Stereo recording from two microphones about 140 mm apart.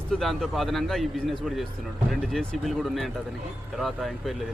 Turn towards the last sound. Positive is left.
turn(degrees=0)  # may be behind; listen again after turning